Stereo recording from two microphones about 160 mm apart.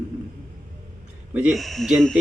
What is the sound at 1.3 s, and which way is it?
Speech, 5° right (ahead or behind).